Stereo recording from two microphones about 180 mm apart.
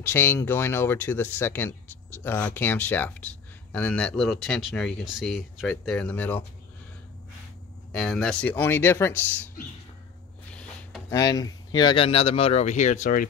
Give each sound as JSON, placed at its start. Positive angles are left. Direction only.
{"t": 0.0, "sound": "speech", "side_deg": 15}
{"t": 7.9, "sound": "speech", "side_deg": 5}
{"t": 10.5, "sound": "a sound", "side_deg": 5}
{"t": 11.1, "sound": "speech", "side_deg": 20}